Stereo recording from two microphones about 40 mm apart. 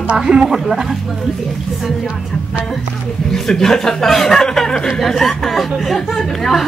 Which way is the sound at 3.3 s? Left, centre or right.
Centre.